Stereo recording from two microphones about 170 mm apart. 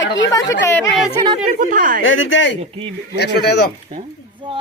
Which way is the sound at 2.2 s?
90° left.